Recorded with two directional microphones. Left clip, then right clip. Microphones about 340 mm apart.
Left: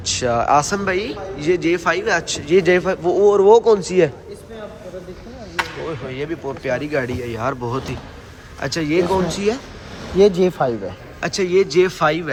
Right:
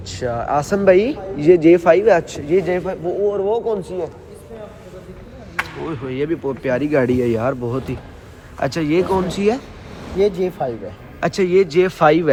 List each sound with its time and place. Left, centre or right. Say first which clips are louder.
0.0 s a man's voice: left 5 dB; centre
6.1 s a man's voice: right 4 dB; centre
10.2 s speech: left 4 dB; left
11.2 s a man's voice: right 2 dB; centre